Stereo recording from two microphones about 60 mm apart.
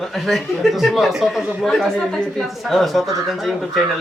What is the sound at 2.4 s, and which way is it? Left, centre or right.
A man's voice, centre.